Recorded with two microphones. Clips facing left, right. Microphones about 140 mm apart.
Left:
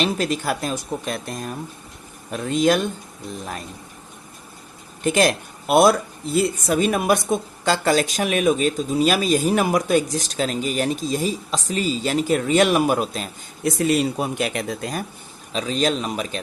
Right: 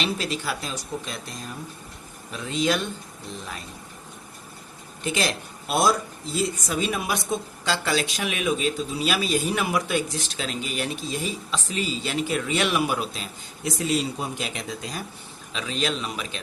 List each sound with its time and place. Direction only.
0.0 s speech: 45° left (ahead or behind)
5.0 s speech: 50° left (ahead or behind)
13.7 s speech: 55° left (ahead or behind)
15.5 s a man's voice: 40° left (ahead or behind)